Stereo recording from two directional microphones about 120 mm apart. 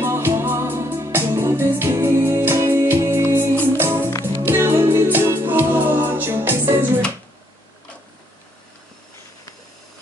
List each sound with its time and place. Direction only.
0.0 s music: 20° right (ahead or behind)